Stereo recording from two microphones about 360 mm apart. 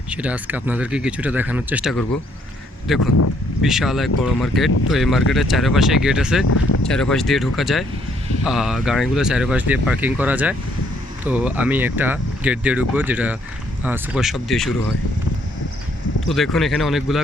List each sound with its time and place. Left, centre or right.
0.1 s speech: centre
3.0 s speech: left
3.6 s speech: centre
16.2 s speech: centre